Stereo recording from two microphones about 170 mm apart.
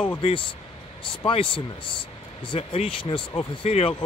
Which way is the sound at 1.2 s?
30° left (ahead or behind).